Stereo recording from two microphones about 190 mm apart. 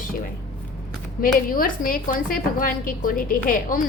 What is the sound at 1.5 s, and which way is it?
A woman's voice, 50° left (ahead or behind).